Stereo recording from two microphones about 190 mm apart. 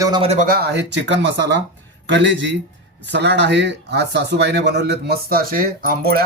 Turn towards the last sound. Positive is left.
turn(degrees=-50)  # may be behind; listen again after turning